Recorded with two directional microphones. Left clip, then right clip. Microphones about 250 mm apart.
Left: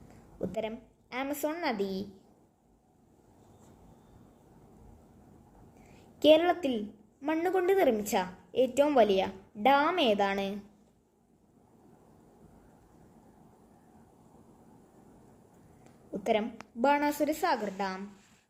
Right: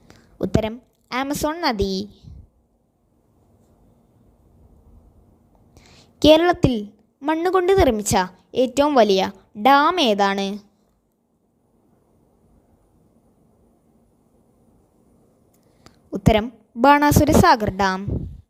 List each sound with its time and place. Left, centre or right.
0.3 s a woman's voice: right
6.1 s a woman's voice: right
15.8 s a woman's voice: right